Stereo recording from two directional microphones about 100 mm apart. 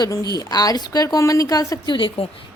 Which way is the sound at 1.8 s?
55° left (ahead or behind).